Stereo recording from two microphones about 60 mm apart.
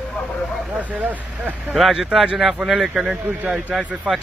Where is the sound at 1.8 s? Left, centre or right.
Centre.